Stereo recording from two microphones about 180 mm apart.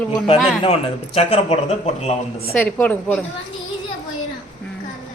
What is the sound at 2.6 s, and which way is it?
Speech, 10° left (ahead or behind).